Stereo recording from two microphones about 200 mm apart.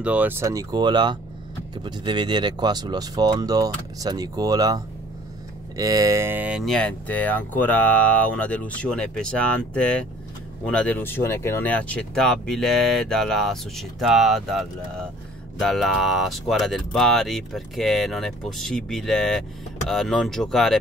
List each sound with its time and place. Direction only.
0.0 s speech: 5° right (ahead or behind)